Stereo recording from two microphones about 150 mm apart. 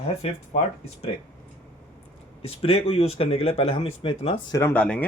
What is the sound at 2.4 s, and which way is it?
Speech, 40° left (ahead or behind).